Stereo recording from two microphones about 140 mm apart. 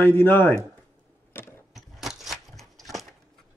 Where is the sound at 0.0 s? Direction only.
15° left (ahead or behind).